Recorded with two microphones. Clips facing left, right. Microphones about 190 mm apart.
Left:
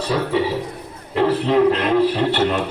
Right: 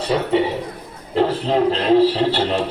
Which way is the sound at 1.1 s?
30° right (ahead or behind).